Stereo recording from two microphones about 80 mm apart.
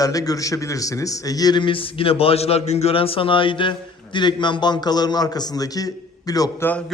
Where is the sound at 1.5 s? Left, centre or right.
Left.